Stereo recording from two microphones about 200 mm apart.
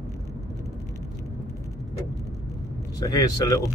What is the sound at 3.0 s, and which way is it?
Speech, 15° left (ahead or behind).